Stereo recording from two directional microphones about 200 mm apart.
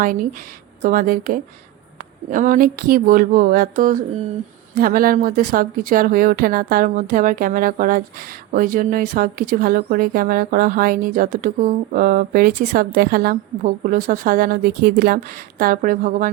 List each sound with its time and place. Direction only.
0.8 s speech: 40° right (ahead or behind)